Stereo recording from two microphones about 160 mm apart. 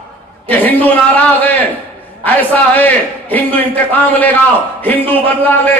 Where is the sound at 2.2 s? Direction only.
10° left (ahead or behind).